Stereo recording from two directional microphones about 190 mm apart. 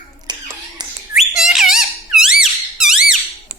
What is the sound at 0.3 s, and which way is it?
Finger snapping, 20° right (ahead or behind).